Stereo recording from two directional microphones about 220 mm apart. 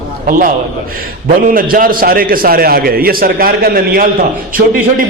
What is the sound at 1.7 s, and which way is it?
A man's voice, 40° right (ahead or behind).